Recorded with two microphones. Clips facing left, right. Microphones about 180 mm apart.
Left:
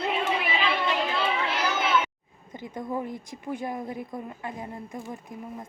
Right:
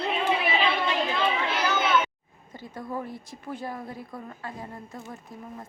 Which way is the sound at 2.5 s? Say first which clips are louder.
Left 3 dB; 20° left (ahead or behind).